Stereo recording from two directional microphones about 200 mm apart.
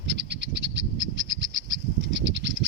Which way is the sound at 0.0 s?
60° right (ahead or behind).